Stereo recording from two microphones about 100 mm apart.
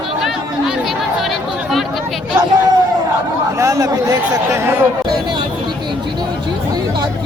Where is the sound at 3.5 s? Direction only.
35° right (ahead or behind).